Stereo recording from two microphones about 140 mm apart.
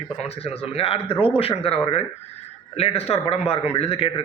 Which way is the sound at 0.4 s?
45° left (ahead or behind).